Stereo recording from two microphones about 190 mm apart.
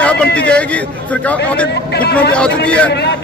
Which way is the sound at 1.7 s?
60° left (ahead or behind).